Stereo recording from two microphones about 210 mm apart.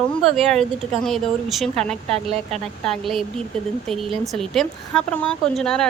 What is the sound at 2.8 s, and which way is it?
Speech, centre (ahead or behind).